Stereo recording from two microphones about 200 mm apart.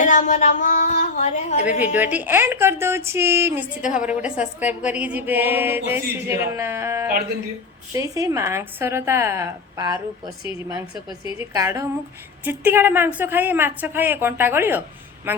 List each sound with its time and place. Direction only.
0.0 s a woman's voice: 40° left (ahead or behind)
1.8 s speech: 10° right (ahead or behind)
11.3 s speech: 15° right (ahead or behind)